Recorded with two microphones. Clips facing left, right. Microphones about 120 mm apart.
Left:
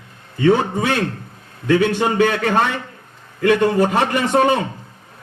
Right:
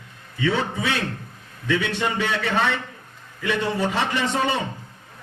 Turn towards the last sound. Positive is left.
turn(degrees=50)  # may be behind; listen again after turning